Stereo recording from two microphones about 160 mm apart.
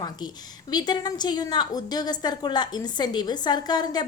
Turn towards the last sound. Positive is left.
turn(degrees=25)  # may be behind; listen again after turning